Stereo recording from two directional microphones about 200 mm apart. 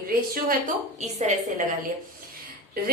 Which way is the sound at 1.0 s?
35° right (ahead or behind).